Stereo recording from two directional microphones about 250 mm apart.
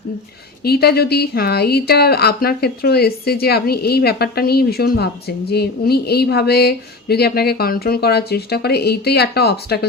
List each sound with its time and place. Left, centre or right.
0.6 s a woman's voice: left